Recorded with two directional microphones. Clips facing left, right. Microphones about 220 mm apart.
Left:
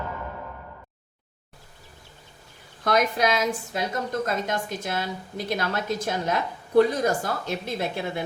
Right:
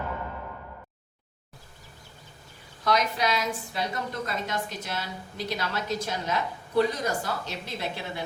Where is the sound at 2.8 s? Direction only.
50° left (ahead or behind).